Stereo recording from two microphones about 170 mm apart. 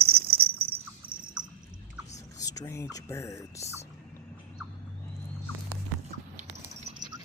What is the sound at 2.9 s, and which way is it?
Speech, 15° left (ahead or behind).